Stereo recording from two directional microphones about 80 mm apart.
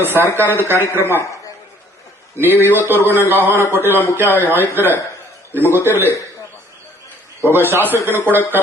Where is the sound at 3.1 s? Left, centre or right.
Right.